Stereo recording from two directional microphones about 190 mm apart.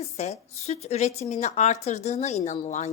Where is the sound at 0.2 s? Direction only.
35° left (ahead or behind).